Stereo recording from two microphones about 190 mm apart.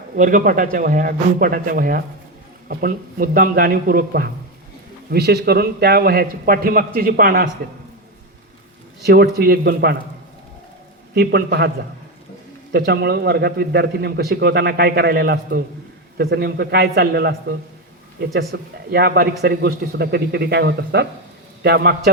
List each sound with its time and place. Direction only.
0.2 s a man's voice: 45° right (ahead or behind)
9.0 s a man's voice: 55° right (ahead or behind)
11.1 s a man's voice: 55° right (ahead or behind)
12.7 s a man's voice: 60° right (ahead or behind)
18.3 s a man's voice: 55° right (ahead or behind)